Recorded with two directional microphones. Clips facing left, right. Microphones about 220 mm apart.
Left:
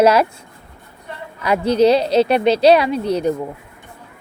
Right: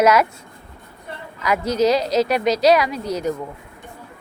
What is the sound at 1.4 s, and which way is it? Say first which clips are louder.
Speech: left 4 dB; 30° left (ahead or behind).